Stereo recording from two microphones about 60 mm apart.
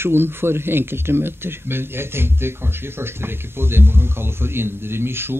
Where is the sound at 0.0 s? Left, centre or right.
Right.